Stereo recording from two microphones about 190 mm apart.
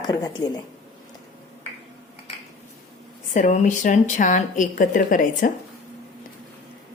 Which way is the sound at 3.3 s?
40° left (ahead or behind).